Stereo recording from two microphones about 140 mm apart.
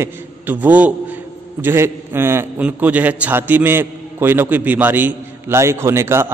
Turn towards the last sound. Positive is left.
turn(degrees=-20)  # may be behind; listen again after turning